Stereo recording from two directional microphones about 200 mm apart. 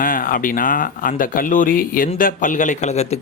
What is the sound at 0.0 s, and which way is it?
A man's voice, 45° left (ahead or behind).